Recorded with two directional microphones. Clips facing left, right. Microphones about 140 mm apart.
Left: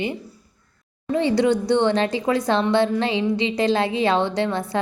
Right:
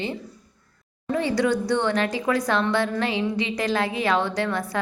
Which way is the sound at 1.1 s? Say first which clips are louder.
Left 4 dB; 25° left (ahead or behind).